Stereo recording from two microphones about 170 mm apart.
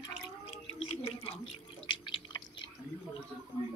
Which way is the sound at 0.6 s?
35° left (ahead or behind).